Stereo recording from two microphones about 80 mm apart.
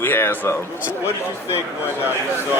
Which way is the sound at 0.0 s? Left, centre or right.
Left.